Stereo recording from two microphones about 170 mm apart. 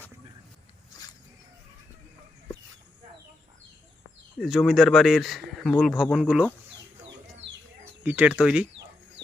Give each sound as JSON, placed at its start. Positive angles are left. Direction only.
{"t": 4.4, "sound": "speech", "side_deg": 0}
{"t": 8.0, "sound": "speech", "side_deg": -10}